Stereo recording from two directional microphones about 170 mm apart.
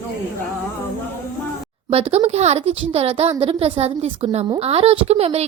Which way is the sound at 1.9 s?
40° right (ahead or behind).